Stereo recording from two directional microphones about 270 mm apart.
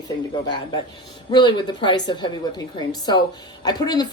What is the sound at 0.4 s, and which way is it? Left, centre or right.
Speech, centre.